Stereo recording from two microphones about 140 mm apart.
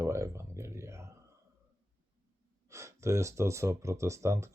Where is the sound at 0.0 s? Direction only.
20° right (ahead or behind).